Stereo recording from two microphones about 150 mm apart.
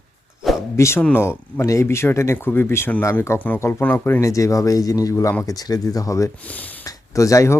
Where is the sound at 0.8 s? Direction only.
20° left (ahead or behind).